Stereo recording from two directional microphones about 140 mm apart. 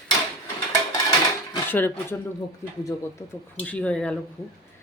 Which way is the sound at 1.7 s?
15° left (ahead or behind).